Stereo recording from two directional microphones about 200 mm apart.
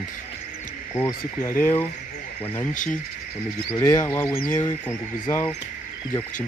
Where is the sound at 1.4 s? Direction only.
10° left (ahead or behind).